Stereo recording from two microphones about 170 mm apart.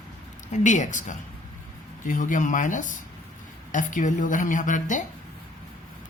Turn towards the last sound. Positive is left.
turn(degrees=50)  # may be behind; listen again after turning